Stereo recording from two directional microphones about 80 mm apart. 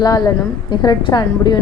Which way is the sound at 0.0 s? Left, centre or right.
Left.